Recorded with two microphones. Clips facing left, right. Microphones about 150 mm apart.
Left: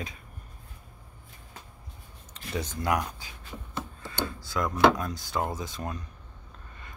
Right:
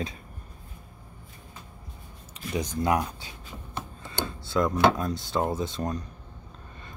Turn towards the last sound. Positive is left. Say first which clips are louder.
# right 6 dB
turn(degrees=-30)  # may be behind; listen again after turning